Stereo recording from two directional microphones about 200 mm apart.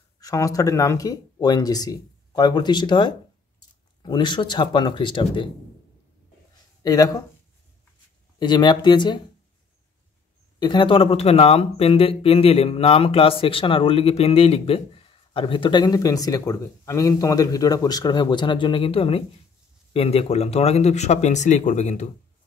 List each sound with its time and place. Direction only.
0.2 s speech: 15° left (ahead or behind)
6.8 s speech: 20° left (ahead or behind)
8.4 s speech: 20° left (ahead or behind)
10.6 s speech: 25° left (ahead or behind)